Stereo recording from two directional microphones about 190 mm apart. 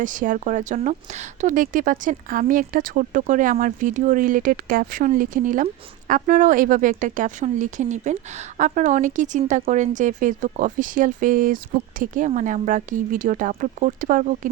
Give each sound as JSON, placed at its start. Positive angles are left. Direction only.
{"t": 0.0, "sound": "speech", "side_deg": -45}